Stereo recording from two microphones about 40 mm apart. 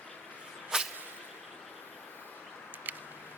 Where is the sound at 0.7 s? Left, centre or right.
Right.